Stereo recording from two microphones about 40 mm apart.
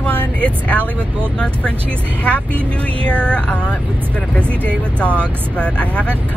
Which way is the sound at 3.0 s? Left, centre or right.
Left.